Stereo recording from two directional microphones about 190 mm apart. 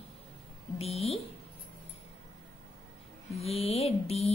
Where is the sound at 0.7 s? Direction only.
30° left (ahead or behind).